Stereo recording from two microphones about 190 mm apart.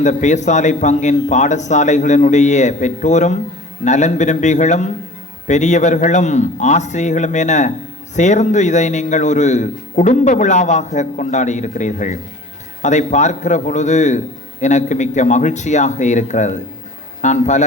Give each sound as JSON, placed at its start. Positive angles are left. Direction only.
{"t": 0.0, "sound": "a man's voice", "side_deg": 40}